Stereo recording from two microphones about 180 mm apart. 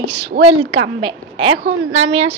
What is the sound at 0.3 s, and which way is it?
Speech, 55° right (ahead or behind).